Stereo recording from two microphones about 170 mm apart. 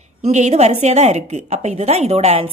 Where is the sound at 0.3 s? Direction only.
40° right (ahead or behind).